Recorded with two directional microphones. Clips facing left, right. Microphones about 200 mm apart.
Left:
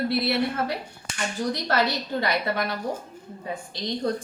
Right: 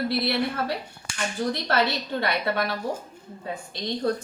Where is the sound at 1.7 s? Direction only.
20° right (ahead or behind).